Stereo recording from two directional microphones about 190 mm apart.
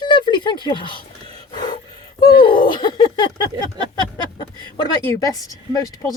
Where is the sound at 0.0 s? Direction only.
25° left (ahead or behind).